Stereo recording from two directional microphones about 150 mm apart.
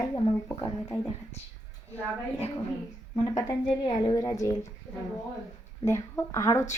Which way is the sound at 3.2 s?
25° left (ahead or behind).